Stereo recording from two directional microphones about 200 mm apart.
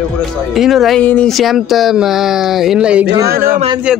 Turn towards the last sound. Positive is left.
turn(degrees=-5)  # may be behind; listen again after turning